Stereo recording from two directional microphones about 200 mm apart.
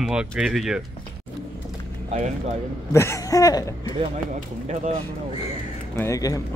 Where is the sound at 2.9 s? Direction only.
15° left (ahead or behind).